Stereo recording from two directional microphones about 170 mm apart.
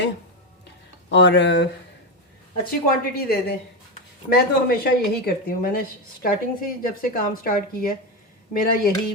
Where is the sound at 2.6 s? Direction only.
60° left (ahead or behind).